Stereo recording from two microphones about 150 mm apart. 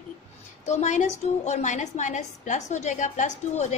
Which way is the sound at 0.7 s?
50° left (ahead or behind).